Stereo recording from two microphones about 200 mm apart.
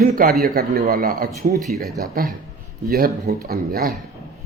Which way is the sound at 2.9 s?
50° right (ahead or behind).